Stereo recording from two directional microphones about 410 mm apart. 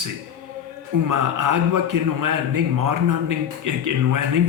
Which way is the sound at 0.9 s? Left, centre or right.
Right.